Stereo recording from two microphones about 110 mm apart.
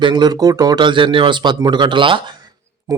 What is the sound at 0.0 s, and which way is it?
Speech, 45° right (ahead or behind).